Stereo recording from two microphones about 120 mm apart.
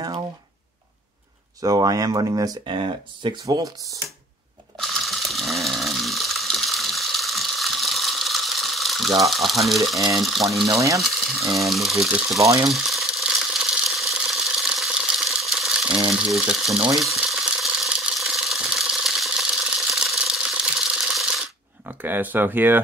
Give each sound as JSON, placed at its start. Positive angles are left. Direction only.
{"t": 1.6, "sound": "speech", "side_deg": -30}
{"t": 3.4, "sound": "speech", "side_deg": -35}
{"t": 4.7, "sound": "a sound", "side_deg": 0}
{"t": 10.1, "sound": "speech", "side_deg": 0}
{"t": 10.7, "sound": "stir", "side_deg": -25}
{"t": 11.0, "sound": "coin", "side_deg": 0}
{"t": 11.6, "sound": "speech", "side_deg": 0}
{"t": 12.6, "sound": "a sound", "side_deg": 0}
{"t": 16.3, "sound": "speech", "side_deg": -5}
{"t": 17.3, "sound": "a sound", "side_deg": 0}
{"t": 21.8, "sound": "speech", "side_deg": -15}